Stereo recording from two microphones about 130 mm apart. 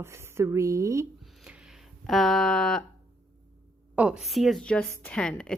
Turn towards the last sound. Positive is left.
turn(degrees=5)  # may be behind; listen again after turning